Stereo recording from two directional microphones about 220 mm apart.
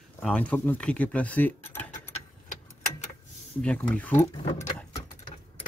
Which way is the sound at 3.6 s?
5° left (ahead or behind).